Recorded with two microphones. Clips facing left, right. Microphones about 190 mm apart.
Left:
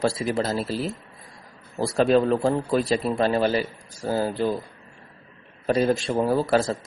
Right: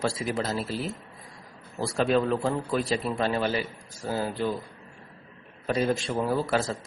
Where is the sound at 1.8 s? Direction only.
35° left (ahead or behind).